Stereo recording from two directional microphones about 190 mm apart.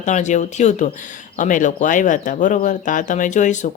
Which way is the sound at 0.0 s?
40° left (ahead or behind).